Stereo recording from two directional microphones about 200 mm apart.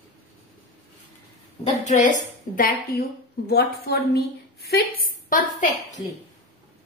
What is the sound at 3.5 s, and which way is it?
A woman's voice, 55° left (ahead or behind).